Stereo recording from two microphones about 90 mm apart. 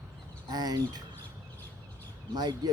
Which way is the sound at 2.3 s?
50° right (ahead or behind).